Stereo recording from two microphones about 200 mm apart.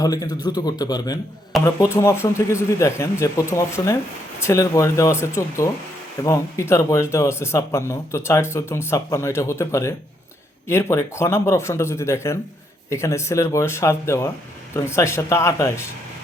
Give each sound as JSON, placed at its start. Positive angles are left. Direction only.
{"t": 0.0, "sound": "a man's voice", "side_deg": 20}